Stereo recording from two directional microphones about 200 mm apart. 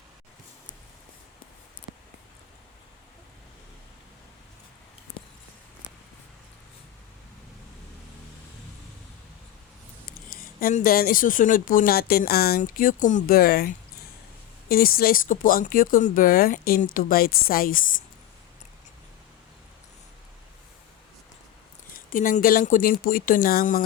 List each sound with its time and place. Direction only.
10.1 s speech: 45° left (ahead or behind)
21.9 s speech: 45° left (ahead or behind)